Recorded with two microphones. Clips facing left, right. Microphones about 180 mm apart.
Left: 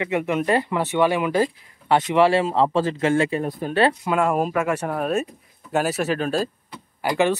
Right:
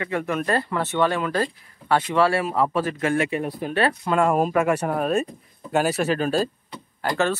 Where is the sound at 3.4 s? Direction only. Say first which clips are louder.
Left 2 dB; 45° left (ahead or behind).